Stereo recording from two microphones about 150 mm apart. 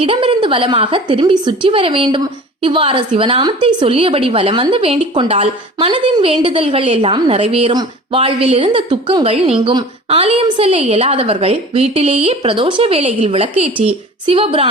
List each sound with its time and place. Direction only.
0.0 s a woman's voice: 35° right (ahead or behind)